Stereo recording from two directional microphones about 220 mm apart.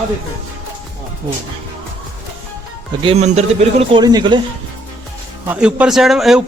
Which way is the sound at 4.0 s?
20° right (ahead or behind).